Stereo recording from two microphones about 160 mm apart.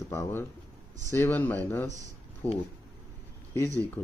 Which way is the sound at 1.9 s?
50° right (ahead or behind).